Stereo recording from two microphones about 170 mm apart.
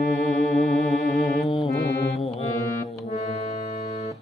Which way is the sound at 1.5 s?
30° left (ahead or behind).